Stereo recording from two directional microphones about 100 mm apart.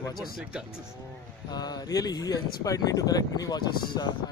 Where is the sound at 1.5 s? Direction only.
40° left (ahead or behind).